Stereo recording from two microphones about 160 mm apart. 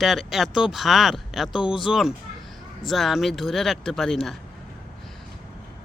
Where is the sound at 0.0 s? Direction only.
Centre (ahead or behind).